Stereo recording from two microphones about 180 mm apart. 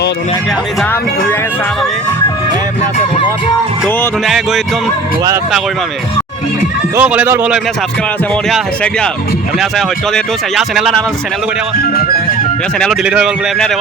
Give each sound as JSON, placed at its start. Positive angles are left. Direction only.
{"t": 0.8, "sound": "speech", "side_deg": 5}
{"t": 4.3, "sound": "speech", "side_deg": 0}
{"t": 6.9, "sound": "speech", "side_deg": -10}
{"t": 11.8, "sound": "speech", "side_deg": 55}
{"t": 12.8, "sound": "speech", "side_deg": 0}